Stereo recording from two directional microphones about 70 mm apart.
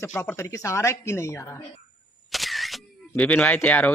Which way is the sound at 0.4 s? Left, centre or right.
Left.